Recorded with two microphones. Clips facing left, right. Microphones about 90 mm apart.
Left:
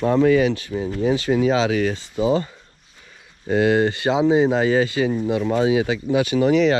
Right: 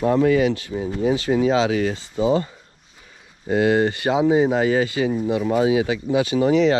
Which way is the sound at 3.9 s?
25° left (ahead or behind).